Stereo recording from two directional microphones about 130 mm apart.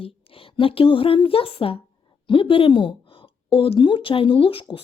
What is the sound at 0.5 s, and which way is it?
A woman's voice, 45° left (ahead or behind).